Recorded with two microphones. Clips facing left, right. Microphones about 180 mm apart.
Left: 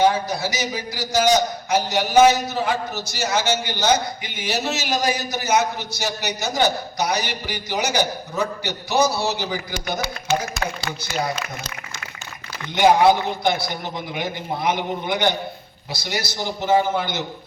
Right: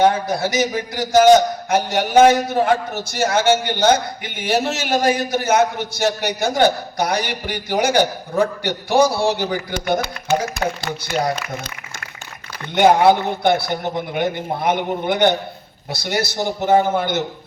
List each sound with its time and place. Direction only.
0.0 s a man's voice: 50° right (ahead or behind)
12.7 s a man's voice: 55° right (ahead or behind)